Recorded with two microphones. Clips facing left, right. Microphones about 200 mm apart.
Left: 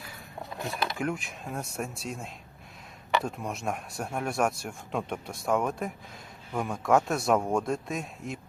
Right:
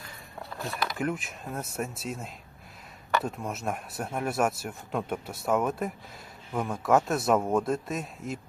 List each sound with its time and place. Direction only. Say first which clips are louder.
0.5 s mechanisms: left 1 dB; 20° left (ahead or behind)
0.9 s speech: right 1 dB; centre (ahead or behind)